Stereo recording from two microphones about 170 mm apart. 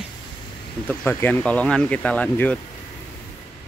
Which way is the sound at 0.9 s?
10° left (ahead or behind).